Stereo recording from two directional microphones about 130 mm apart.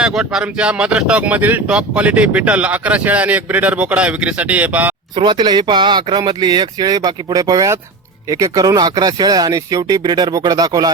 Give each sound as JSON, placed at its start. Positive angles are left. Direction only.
{"t": 0.0, "sound": "speech", "side_deg": -5}
{"t": 5.1, "sound": "speech", "side_deg": -35}